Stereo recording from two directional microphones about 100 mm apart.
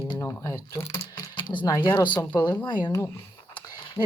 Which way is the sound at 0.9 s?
50° left (ahead or behind).